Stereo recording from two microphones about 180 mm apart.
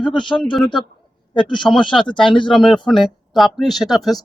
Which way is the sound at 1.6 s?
5° left (ahead or behind).